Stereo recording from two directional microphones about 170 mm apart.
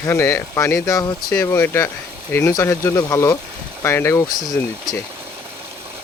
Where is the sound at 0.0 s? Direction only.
15° left (ahead or behind).